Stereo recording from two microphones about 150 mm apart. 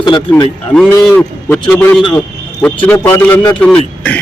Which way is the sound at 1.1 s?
15° left (ahead or behind).